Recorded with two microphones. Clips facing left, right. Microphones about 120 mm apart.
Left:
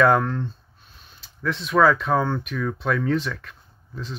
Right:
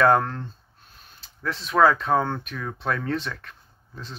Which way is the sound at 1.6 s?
30° right (ahead or behind).